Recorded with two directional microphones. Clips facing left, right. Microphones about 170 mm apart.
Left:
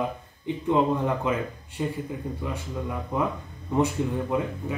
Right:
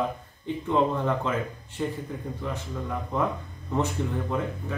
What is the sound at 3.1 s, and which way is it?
Speech, 10° left (ahead or behind).